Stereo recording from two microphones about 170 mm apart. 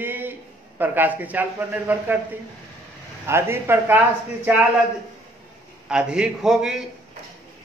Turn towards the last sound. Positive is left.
turn(degrees=-5)  # may be behind; listen again after turning